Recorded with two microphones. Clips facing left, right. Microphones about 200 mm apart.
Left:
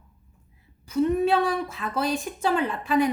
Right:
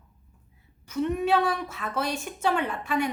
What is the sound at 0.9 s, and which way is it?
A woman's voice, 35° left (ahead or behind).